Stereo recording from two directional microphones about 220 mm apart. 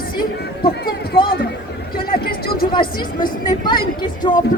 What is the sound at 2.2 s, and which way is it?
Music, 45° left (ahead or behind).